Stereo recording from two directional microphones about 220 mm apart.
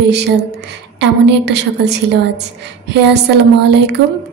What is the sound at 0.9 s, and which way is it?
A woman's voice, 50° right (ahead or behind).